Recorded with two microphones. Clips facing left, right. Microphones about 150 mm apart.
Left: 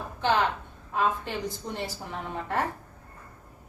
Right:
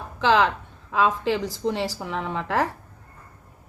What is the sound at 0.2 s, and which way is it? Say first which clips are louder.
A woman's voice: right 5 dB; 90° right.